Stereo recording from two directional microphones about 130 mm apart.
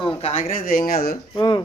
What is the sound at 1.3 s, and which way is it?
Speech, 35° left (ahead or behind).